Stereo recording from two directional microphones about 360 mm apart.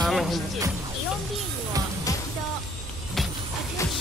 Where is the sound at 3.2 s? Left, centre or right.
Centre.